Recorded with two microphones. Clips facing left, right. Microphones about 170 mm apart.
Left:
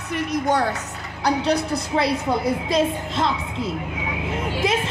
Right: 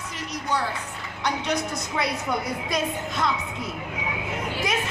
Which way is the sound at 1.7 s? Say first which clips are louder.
Left 6 dB; 30° left (ahead or behind).